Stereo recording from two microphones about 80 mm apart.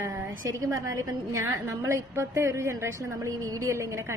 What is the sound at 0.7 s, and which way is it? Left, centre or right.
A woman's voice, right.